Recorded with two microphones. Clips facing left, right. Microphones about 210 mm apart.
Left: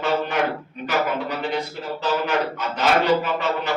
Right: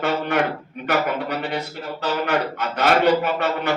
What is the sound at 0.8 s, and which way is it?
Speech, 55° right (ahead or behind).